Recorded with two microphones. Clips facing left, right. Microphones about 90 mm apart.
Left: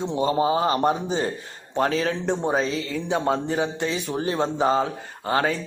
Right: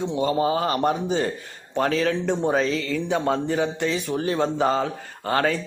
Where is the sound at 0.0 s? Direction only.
30° left (ahead or behind).